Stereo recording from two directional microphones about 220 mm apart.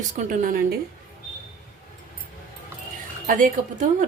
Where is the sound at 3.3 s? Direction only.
35° right (ahead or behind).